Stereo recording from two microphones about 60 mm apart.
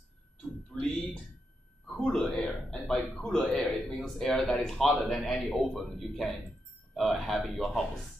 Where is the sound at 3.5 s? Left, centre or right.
Left.